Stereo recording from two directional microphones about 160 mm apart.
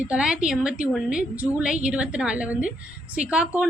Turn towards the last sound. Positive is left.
turn(degrees=-5)  # may be behind; listen again after turning